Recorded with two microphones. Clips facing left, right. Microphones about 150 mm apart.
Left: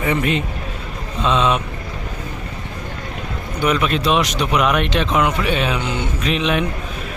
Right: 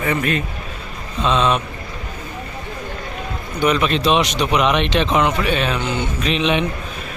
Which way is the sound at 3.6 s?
5° left (ahead or behind).